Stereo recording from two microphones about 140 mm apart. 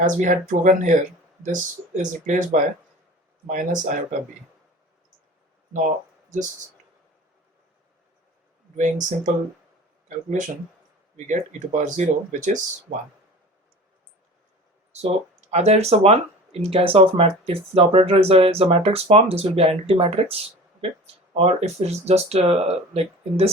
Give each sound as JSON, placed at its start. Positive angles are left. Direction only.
{"t": 0.0, "sound": "speech", "side_deg": -70}
{"t": 6.3, "sound": "speech", "side_deg": -65}
{"t": 8.7, "sound": "speech", "side_deg": -65}
{"t": 12.9, "sound": "speech", "side_deg": -80}
{"t": 14.9, "sound": "speech", "side_deg": -50}
{"t": 20.3, "sound": "a sound", "side_deg": -45}
{"t": 21.3, "sound": "speech", "side_deg": -50}